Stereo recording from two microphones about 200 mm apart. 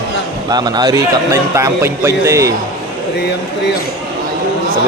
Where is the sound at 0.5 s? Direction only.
20° right (ahead or behind).